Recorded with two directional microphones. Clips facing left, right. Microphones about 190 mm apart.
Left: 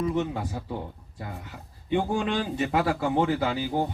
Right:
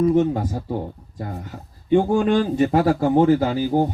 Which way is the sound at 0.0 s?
45° right (ahead or behind).